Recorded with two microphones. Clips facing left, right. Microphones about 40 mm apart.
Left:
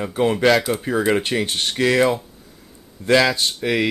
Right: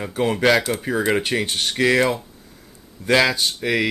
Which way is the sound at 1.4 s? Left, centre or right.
Left.